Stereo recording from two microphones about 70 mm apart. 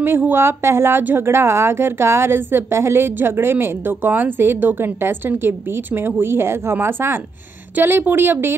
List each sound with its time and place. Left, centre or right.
0.0 s speech: right